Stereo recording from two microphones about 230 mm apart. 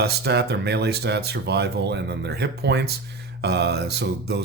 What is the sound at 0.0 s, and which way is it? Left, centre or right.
Speech, right.